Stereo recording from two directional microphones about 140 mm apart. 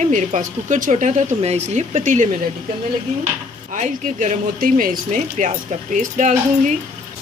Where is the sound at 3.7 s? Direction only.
60° right (ahead or behind).